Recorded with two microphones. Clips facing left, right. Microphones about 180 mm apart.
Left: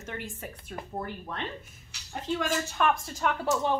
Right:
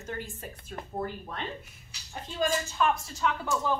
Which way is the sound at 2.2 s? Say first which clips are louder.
Even; 65° left (ahead or behind).